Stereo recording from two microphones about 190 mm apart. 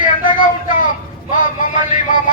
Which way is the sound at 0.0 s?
45° left (ahead or behind).